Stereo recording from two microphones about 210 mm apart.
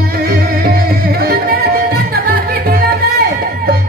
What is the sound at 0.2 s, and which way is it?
Music, 45° right (ahead or behind).